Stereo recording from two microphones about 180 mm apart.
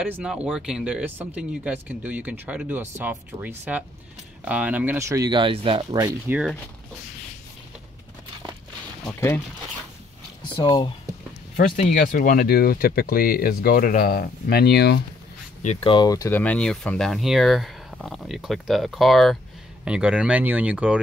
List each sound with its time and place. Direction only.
0.0 s speech: 5° right (ahead or behind); by 6.0 s 30° right (ahead or behind)
6.0 s speech: 10° right (ahead or behind)
9.0 s speech: 10° left (ahead or behind)
10.6 s speech: 25° left (ahead or behind)
11.5 s speech: 45° left (ahead or behind); by 15.0 s 65° left (ahead or behind)
15.6 s speech: 35° left (ahead or behind); by 21.0 s 5° right (ahead or behind)